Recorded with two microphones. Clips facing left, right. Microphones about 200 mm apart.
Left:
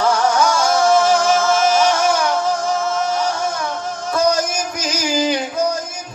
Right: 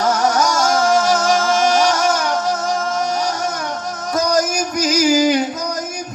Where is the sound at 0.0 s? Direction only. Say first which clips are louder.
Left 1 dB; 40° right (ahead or behind).